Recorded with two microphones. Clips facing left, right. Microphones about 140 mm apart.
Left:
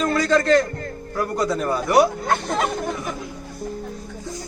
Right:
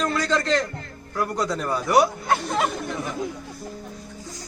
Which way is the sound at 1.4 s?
10° left (ahead or behind).